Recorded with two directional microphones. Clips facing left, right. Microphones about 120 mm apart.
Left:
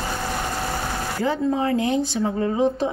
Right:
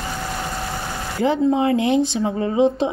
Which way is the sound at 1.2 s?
20° right (ahead or behind).